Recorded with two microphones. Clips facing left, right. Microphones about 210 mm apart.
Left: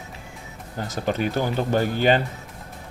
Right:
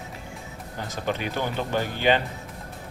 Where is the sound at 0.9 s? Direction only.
40° left (ahead or behind).